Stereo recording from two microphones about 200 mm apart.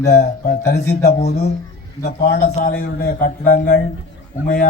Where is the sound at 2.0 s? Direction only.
55° left (ahead or behind).